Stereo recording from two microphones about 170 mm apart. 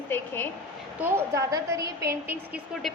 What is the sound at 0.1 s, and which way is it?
Speech, 10° left (ahead or behind).